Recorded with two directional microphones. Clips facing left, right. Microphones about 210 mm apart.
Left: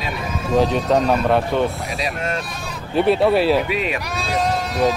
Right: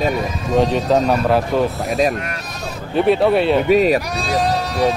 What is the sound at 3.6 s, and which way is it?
Speech, 40° right (ahead or behind).